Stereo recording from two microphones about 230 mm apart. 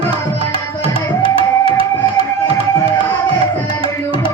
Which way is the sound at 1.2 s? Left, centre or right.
Right.